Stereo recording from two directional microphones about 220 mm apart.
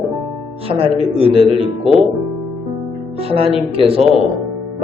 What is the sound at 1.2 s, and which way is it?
Speech, 25° right (ahead or behind).